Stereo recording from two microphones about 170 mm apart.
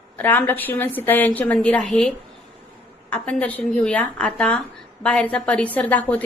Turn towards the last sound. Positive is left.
turn(degrees=10)  # may be behind; listen again after turning